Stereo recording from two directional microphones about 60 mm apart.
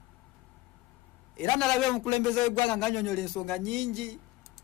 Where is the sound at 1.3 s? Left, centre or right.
Centre.